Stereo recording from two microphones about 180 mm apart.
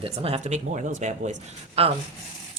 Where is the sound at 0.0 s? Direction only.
35° right (ahead or behind).